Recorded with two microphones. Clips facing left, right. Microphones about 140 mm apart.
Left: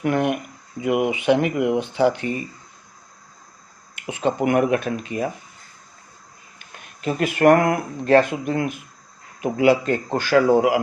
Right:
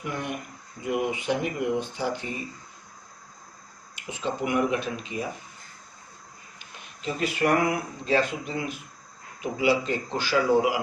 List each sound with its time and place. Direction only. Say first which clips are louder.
0.0 s speech: left 11 dB; 70° left (ahead or behind)
3.9 s speech: left 8 dB; 60° left (ahead or behind)
6.6 s a man's voice: left 7 dB; 55° left (ahead or behind)